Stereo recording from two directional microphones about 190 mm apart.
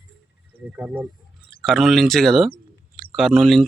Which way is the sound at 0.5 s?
5° right (ahead or behind).